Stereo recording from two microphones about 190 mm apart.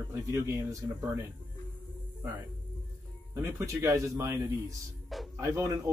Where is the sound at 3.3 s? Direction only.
15° right (ahead or behind).